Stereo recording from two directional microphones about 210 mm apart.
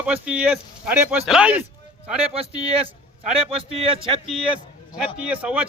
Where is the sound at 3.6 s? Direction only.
25° right (ahead or behind).